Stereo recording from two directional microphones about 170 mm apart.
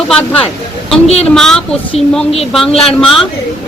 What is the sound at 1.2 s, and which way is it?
Speech, centre (ahead or behind).